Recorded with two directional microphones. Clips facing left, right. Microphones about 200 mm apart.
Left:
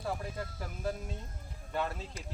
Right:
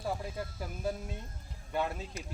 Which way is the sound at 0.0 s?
10° right (ahead or behind).